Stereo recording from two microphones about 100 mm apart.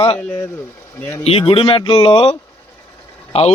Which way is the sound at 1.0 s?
20° left (ahead or behind).